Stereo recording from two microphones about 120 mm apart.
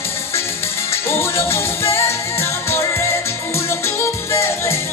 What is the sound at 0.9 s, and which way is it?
Music, 20° left (ahead or behind).